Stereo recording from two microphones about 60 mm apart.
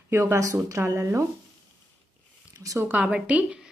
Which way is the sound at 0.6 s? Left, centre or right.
Right.